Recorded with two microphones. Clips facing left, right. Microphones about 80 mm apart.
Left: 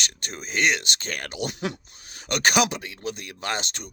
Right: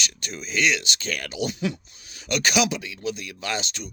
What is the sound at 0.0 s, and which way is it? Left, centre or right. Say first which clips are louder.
Speech: right 1 dB; left.